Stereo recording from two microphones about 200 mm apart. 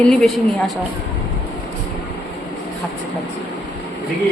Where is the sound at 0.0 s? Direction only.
Centre (ahead or behind).